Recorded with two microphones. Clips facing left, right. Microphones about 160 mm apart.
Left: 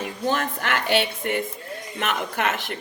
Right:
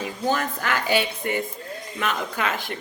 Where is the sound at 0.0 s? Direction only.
55° left (ahead or behind).